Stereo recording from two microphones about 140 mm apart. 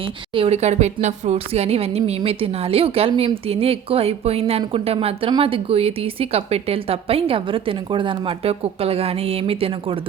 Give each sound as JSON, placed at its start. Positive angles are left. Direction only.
{"t": 0.3, "sound": "a woman's voice", "side_deg": -45}